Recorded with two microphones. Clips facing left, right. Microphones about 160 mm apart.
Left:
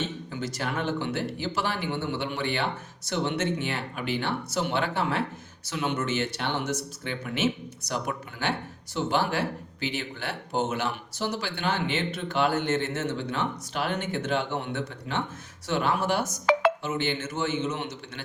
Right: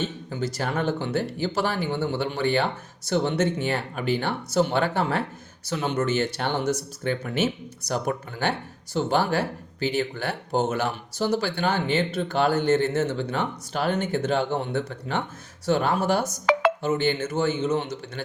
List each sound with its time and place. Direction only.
0.3 s speech: 35° right (ahead or behind)